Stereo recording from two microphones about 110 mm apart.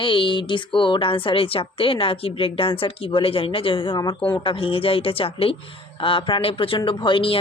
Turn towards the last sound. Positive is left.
turn(degrees=50)  # may be behind; listen again after turning